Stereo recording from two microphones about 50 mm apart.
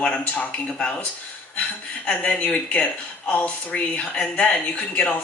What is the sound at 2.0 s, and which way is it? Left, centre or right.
Speech, left.